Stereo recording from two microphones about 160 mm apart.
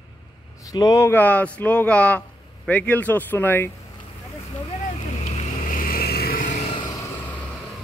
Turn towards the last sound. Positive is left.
turn(degrees=20)  # may be behind; listen again after turning